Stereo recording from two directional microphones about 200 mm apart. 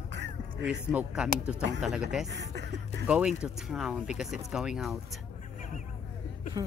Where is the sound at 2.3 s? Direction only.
60° right (ahead or behind).